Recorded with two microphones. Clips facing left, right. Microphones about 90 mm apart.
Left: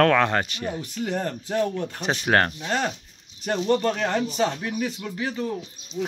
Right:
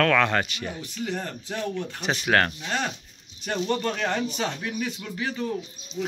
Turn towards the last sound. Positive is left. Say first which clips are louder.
# left 1 dB
turn(degrees=10)  # may be behind; listen again after turning